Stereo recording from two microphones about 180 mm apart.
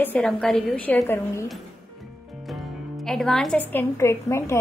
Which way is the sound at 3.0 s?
5° left (ahead or behind).